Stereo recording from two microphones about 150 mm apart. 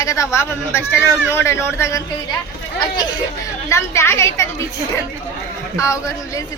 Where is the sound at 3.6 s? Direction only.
20° left (ahead or behind).